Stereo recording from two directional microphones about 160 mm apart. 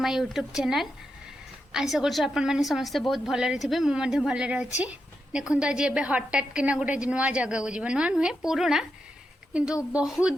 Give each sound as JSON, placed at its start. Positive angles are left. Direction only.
{"t": 0.0, "sound": "a woman's voice", "side_deg": 0}